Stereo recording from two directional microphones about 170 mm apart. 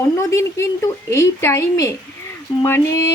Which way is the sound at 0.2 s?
15° left (ahead or behind).